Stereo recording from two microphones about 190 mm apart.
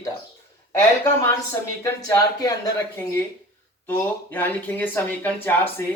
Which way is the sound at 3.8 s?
10° left (ahead or behind).